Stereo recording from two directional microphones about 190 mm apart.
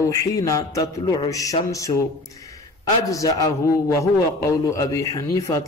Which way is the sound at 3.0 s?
20° left (ahead or behind).